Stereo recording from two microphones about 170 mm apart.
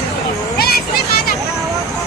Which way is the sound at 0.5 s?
65° left (ahead or behind).